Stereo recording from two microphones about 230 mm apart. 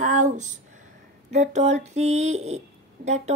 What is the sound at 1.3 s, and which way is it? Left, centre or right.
Speech, right.